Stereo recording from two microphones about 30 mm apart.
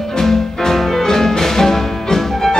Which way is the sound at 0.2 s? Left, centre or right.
Centre.